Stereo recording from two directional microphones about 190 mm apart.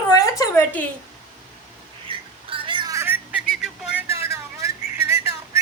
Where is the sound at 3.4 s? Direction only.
5° right (ahead or behind).